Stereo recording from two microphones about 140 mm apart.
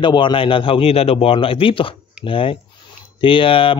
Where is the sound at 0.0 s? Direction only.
35° left (ahead or behind).